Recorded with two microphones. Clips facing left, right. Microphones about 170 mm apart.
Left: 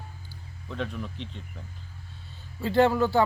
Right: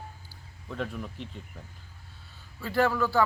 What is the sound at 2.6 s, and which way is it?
Speech, 25° left (ahead or behind).